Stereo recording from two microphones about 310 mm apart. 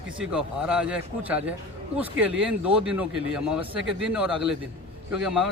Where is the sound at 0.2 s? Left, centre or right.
Centre.